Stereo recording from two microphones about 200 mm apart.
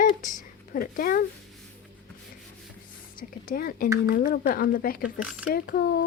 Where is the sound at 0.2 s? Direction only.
40° left (ahead or behind).